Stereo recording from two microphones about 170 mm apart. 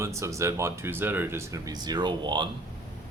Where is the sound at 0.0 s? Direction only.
15° right (ahead or behind).